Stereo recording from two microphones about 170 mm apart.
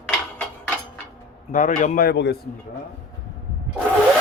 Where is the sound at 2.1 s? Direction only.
80° left.